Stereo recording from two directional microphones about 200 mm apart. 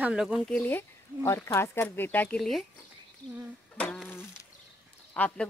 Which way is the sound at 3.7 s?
5° left (ahead or behind).